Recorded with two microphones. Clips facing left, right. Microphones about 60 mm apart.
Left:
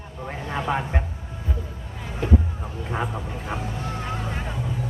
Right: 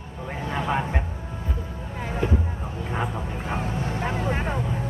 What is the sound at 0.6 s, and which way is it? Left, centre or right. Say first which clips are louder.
Vehicle: even; centre.